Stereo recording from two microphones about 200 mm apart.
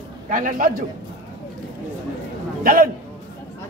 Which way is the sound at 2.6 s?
45° right (ahead or behind).